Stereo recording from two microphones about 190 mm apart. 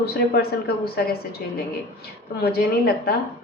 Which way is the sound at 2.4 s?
55° left (ahead or behind).